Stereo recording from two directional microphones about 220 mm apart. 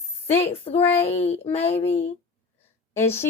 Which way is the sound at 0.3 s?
25° left (ahead or behind).